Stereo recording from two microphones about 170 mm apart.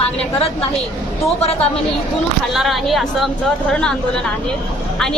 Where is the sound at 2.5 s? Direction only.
Centre (ahead or behind).